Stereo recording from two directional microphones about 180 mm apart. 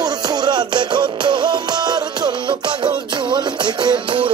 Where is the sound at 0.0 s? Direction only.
25° right (ahead or behind).